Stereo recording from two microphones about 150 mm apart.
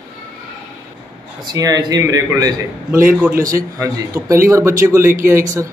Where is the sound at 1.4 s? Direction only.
25° right (ahead or behind).